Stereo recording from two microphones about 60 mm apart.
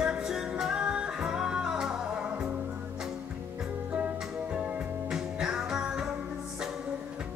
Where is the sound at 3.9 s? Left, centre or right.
Right.